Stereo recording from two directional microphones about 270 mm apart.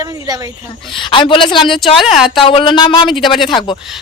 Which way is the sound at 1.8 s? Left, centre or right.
Centre.